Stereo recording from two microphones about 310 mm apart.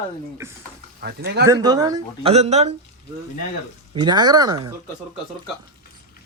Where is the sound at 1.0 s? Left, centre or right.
Right.